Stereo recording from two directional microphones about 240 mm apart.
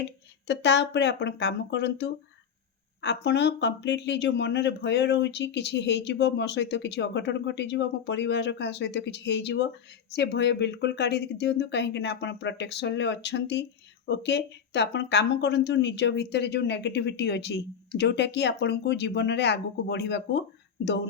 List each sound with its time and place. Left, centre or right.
0.0 s speech: left